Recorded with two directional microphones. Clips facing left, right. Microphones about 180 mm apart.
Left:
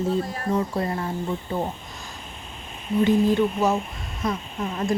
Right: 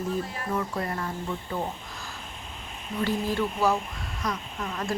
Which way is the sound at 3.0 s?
20° left (ahead or behind).